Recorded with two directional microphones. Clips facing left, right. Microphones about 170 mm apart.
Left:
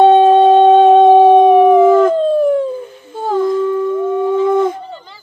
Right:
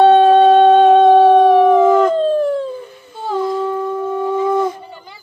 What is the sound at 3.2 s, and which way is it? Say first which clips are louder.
Humming: left 4 dB; 50° left (ahead or behind).